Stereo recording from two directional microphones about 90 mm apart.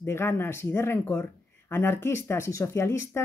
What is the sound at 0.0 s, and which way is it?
Speech, 25° left (ahead or behind).